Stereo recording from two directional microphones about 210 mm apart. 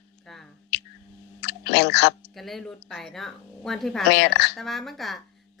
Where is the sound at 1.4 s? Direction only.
55° left (ahead or behind).